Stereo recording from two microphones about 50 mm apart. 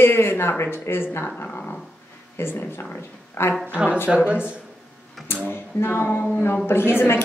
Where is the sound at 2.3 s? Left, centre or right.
Left.